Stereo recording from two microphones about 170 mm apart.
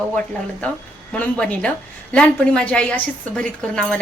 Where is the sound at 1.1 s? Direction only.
10° left (ahead or behind).